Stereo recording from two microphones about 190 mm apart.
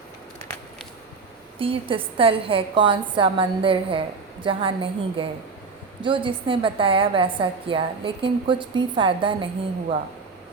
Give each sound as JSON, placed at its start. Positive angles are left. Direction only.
{"t": 1.5, "sound": "a woman's voice", "side_deg": -30}